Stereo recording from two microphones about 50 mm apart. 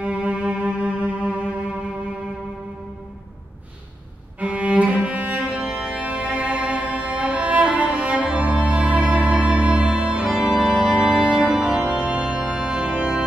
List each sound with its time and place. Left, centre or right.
0.0 s music: right
4.4 s cello: right
5.9 s music: right